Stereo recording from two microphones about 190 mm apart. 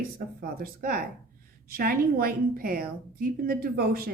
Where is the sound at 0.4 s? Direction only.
50° right (ahead or behind).